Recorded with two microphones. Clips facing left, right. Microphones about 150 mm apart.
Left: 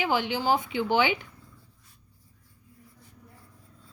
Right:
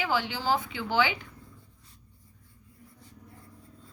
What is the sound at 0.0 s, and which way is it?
A woman's voice, 20° left (ahead or behind).